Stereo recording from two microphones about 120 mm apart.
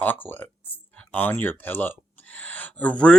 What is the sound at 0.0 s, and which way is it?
Speech, 15° left (ahead or behind).